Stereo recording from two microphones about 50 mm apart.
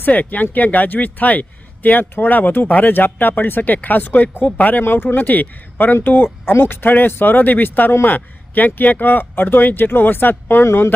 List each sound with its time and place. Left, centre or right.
0.0 s speech: left
4.8 s speech: left